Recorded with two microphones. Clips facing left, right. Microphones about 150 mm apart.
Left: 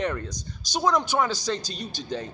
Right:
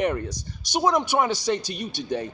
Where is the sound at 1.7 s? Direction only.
60° right (ahead or behind).